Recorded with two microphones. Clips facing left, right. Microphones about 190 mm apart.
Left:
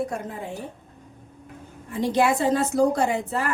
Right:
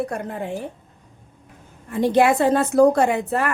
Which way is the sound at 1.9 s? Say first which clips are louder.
Right 5 dB; 60° right (ahead or behind).